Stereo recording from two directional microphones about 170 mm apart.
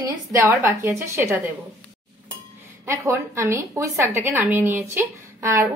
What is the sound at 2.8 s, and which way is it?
A woman's voice, 20° right (ahead or behind).